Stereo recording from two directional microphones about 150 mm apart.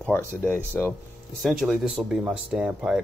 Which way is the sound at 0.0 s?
10° left (ahead or behind).